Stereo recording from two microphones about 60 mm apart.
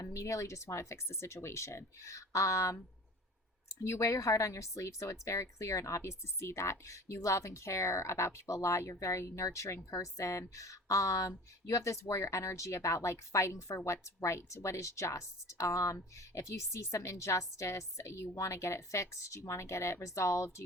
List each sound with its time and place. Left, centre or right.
0.0 s speech: left
3.8 s speech: left
6.0 s speech: left